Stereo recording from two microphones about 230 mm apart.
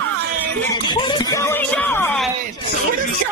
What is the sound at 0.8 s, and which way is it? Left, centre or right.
Music, centre.